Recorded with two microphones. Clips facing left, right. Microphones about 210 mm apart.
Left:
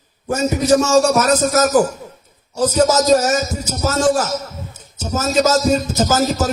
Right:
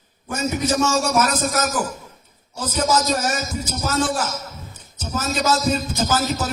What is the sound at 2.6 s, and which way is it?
A man's voice, 40° left (ahead or behind).